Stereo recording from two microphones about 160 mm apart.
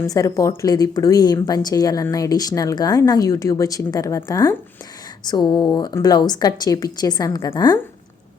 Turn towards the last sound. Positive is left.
turn(degrees=25)  # may be behind; listen again after turning